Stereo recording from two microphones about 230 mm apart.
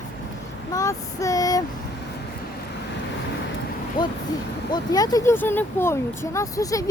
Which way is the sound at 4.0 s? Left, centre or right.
Centre.